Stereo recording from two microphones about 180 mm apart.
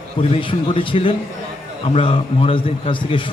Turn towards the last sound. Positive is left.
turn(degrees=30)  # may be behind; listen again after turning